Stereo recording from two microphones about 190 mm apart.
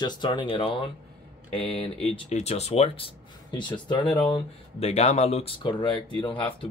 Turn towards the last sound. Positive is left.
turn(degrees=25)  # may be behind; listen again after turning